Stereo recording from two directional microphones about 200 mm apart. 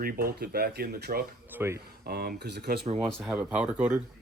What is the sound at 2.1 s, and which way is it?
Speech, 50° right (ahead or behind).